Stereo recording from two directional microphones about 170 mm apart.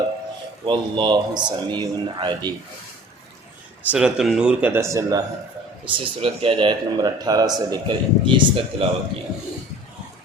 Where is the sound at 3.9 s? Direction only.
5° right (ahead or behind).